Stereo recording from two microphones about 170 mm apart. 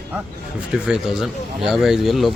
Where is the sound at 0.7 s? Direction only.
5° right (ahead or behind).